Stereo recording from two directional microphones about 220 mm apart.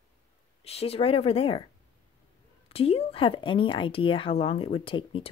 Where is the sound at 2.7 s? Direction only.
25° left (ahead or behind).